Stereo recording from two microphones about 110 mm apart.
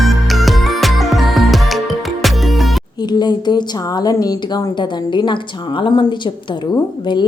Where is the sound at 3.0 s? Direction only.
40° left (ahead or behind).